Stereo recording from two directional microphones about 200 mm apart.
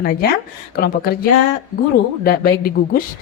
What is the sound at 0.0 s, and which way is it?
Speech, 50° left (ahead or behind).